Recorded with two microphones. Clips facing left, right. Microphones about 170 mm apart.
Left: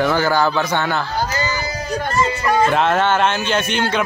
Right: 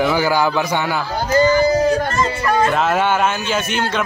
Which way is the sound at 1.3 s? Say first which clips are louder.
Right 10 dB; 50° right (ahead or behind).